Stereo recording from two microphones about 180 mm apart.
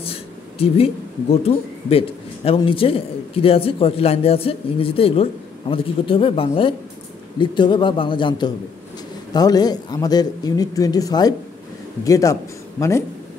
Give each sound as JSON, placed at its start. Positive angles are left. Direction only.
{"t": 0.0, "sound": "a man's voice", "side_deg": 35}